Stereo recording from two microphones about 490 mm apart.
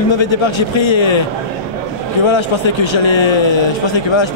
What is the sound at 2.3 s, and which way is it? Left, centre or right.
A man's voice, left.